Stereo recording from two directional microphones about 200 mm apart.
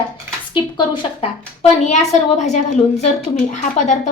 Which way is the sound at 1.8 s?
35° left (ahead or behind).